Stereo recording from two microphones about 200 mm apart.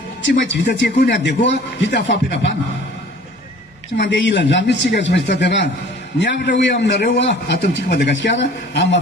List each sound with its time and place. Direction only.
0.2 s speech: 65° left (ahead or behind)
3.9 s speech: 60° left (ahead or behind)